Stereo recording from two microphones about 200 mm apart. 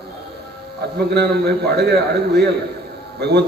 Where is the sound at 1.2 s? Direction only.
55° right (ahead or behind).